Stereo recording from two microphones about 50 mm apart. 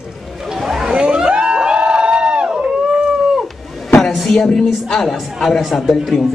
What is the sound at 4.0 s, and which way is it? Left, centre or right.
Speech, centre.